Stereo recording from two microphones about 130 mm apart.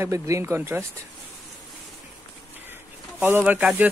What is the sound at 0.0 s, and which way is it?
Speech, 20° right (ahead or behind).